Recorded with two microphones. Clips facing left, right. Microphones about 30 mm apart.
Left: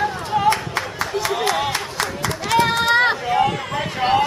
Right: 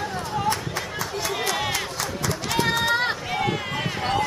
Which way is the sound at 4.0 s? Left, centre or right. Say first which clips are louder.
Left 8 dB; left.